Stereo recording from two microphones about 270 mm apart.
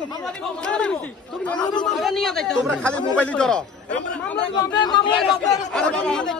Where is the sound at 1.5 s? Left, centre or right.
Centre.